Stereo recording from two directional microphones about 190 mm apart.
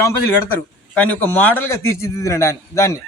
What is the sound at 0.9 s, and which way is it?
Speech, 10° left (ahead or behind).